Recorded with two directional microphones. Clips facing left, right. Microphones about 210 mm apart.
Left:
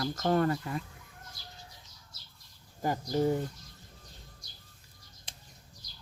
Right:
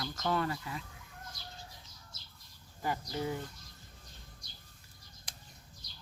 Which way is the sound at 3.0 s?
40° left (ahead or behind).